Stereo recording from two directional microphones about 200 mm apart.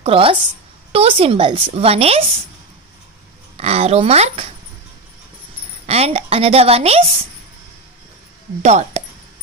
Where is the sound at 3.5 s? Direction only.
30° right (ahead or behind).